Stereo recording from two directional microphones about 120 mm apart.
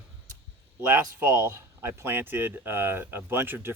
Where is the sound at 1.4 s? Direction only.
20° right (ahead or behind).